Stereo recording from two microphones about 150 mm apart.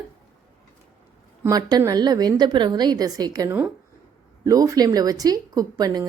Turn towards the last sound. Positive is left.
turn(degrees=-25)  # may be behind; listen again after turning